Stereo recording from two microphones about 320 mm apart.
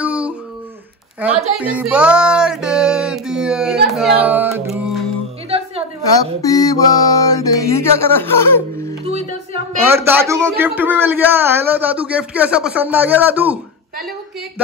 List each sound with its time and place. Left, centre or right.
0.0 s a sound: centre
1.6 s music: centre
6.4 s mantra: centre
8.8 s music: centre
9.8 s a man's voice: centre